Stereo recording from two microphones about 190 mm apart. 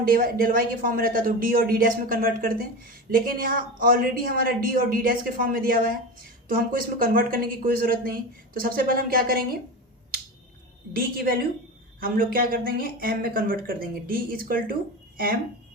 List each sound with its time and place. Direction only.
0.0 s speech: 50° right (ahead or behind)
10.9 s speech: 50° right (ahead or behind)